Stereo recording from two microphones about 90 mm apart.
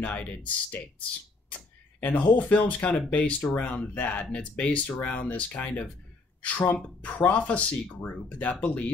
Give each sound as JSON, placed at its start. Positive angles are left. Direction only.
{"t": 0.0, "sound": "speech", "side_deg": 15}
{"t": 2.1, "sound": "speech", "side_deg": 15}